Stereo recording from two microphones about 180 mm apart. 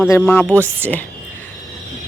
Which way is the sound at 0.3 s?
10° left (ahead or behind).